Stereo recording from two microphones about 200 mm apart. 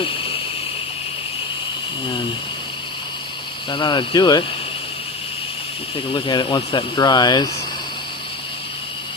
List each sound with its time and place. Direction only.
3.7 s speech: 25° left (ahead or behind)
6.1 s speech: 25° left (ahead or behind)